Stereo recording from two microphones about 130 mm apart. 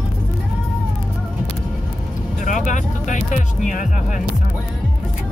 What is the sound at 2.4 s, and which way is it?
Music, 75° left (ahead or behind).